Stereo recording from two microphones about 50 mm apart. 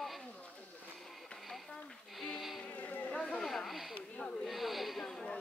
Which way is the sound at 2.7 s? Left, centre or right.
Left.